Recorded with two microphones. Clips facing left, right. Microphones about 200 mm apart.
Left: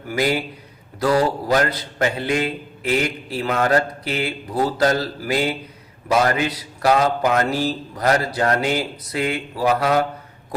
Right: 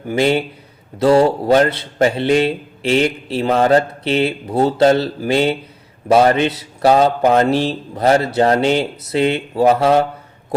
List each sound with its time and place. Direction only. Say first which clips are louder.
0.1 s a man's voice: right 5 dB; 25° right (ahead or behind)